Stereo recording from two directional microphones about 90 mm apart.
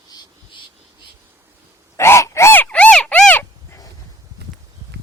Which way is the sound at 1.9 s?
30° left (ahead or behind).